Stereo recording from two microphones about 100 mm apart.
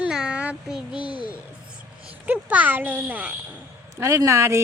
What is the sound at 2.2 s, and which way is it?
A child's voice, 15° right (ahead or behind).